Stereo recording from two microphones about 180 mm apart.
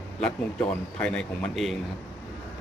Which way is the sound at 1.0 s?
5° left (ahead or behind).